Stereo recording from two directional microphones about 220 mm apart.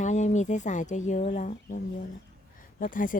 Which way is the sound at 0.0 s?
35° left (ahead or behind).